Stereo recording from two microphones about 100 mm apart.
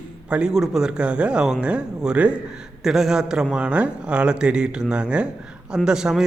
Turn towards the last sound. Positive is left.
turn(degrees=-5)  # may be behind; listen again after turning